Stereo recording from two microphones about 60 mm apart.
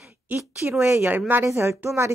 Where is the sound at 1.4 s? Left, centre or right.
Right.